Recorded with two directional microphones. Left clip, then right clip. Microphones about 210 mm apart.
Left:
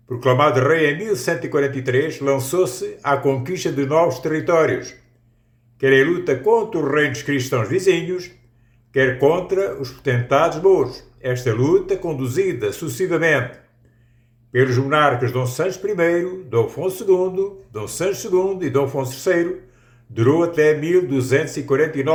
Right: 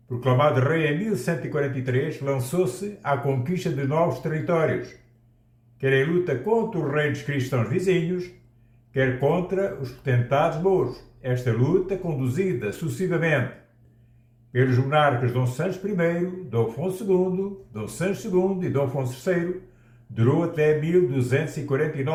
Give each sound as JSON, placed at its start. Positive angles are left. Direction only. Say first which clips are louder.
{"t": 0.2, "sound": "a man's voice", "louder": "left 6 dB", "side_deg": 55}
{"t": 14.5, "sound": "a man's voice", "louder": "left 5 dB", "side_deg": 55}